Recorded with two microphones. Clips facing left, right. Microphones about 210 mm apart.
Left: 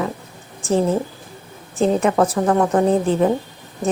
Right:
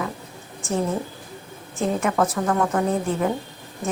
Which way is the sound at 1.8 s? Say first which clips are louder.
Left 5 dB; 35° left (ahead or behind).